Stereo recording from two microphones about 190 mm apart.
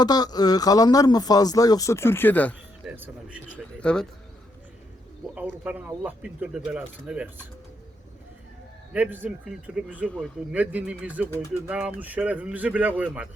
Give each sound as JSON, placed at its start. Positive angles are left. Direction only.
{"t": 0.0, "sound": "speech", "side_deg": 20}
{"t": 2.8, "sound": "speech", "side_deg": -5}
{"t": 3.8, "sound": "speech", "side_deg": 5}
{"t": 5.3, "sound": "speech", "side_deg": -5}
{"t": 8.9, "sound": "speech", "side_deg": -10}
{"t": 10.1, "sound": "speech", "side_deg": 5}
{"t": 10.5, "sound": "speech", "side_deg": -10}